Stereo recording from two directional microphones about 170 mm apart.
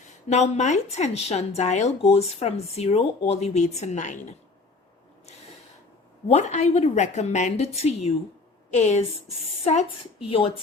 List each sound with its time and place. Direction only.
0.1 s a woman's voice: 40° left (ahead or behind)
6.2 s a woman's voice: 45° left (ahead or behind)